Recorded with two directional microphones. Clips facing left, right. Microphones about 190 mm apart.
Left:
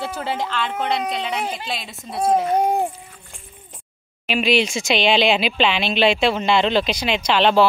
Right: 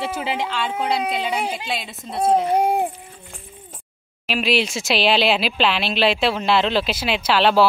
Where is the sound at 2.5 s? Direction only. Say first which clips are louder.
Even; 10° right (ahead or behind).